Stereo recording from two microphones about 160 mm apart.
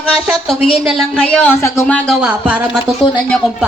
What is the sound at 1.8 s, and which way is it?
Speech, 5° left (ahead or behind).